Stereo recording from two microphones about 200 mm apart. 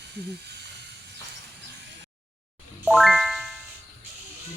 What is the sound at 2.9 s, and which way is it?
Music, centre (ahead or behind).